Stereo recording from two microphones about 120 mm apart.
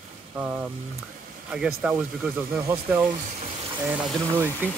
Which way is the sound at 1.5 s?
10° right (ahead or behind).